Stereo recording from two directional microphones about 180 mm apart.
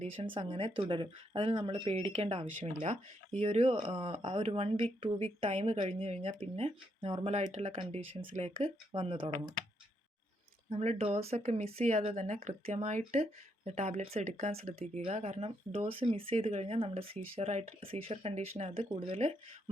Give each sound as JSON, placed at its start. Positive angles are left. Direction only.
{"t": 0.3, "sound": "speech", "side_deg": -30}
{"t": 10.7, "sound": "speech", "side_deg": -35}